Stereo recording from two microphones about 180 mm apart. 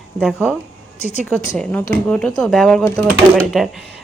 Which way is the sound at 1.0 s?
40° left (ahead or behind).